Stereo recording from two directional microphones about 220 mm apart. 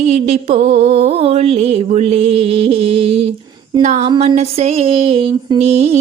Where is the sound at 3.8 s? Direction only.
30° right (ahead or behind).